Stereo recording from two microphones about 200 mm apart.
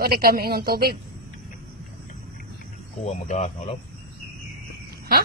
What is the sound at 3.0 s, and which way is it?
Speech, 35° left (ahead or behind).